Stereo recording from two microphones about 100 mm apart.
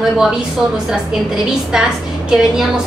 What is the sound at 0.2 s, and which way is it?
A woman's voice, 5° right (ahead or behind).